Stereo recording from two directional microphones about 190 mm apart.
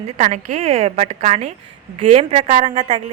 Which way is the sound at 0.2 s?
40° right (ahead or behind).